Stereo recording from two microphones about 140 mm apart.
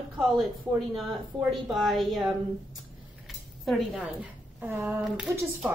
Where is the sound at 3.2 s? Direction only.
Centre (ahead or behind); by 4.9 s 15° right (ahead or behind).